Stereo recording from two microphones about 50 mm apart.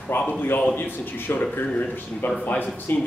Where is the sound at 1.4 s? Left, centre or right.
Left.